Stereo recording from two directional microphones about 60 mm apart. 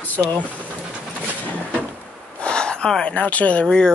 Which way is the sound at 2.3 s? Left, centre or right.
Centre.